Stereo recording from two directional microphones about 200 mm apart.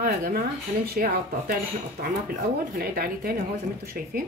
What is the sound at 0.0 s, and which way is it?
Speech, 45° right (ahead or behind).